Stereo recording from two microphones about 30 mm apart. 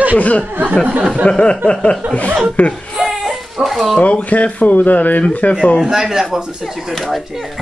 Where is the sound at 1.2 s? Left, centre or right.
Left.